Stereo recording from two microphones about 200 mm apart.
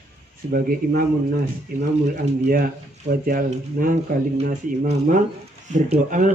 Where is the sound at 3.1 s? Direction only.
45° right (ahead or behind).